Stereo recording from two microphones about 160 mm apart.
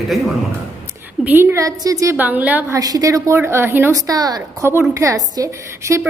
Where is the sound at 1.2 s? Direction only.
10° right (ahead or behind).